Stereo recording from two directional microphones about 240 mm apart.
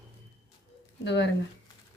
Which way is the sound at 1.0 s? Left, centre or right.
Left.